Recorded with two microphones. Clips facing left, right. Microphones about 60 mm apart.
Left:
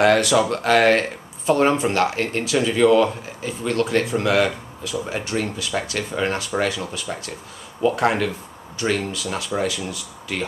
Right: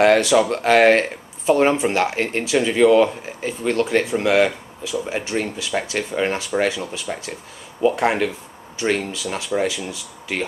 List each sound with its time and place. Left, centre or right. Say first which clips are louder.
0.0 s speech: right 2 dB; right
3.4 s speech: right 2 dB; right
3.9 s speech: right 2 dB; right